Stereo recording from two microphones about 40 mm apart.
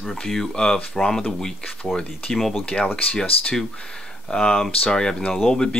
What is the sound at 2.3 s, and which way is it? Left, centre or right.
Speech, centre.